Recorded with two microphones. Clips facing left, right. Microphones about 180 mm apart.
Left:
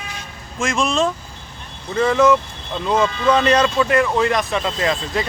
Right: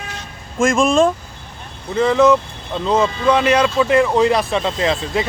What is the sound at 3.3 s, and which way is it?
Speech, 10° right (ahead or behind).